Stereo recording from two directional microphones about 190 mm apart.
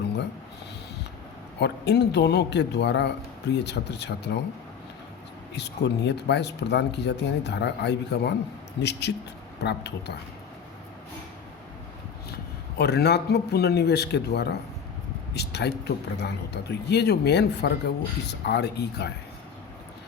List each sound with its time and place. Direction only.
1.5 s speech: 60° left (ahead or behind)
5.5 s speech: 65° left (ahead or behind)
12.7 s speech: 60° left (ahead or behind)